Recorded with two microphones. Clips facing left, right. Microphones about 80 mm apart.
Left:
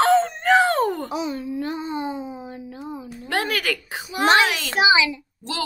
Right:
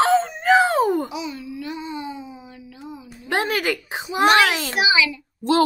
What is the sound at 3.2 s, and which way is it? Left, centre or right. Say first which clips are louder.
A woman's voice: right 2 dB; right.